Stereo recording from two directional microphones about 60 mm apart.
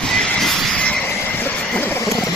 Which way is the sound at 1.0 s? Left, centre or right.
Left.